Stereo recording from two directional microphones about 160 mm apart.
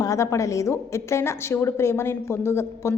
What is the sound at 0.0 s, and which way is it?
A woman's voice, 20° left (ahead or behind).